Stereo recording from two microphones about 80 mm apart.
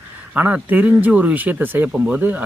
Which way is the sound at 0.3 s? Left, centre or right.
Right.